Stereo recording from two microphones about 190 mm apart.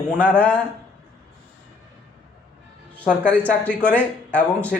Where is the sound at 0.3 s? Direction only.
5° left (ahead or behind).